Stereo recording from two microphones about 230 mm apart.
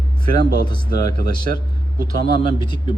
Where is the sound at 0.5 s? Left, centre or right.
Right.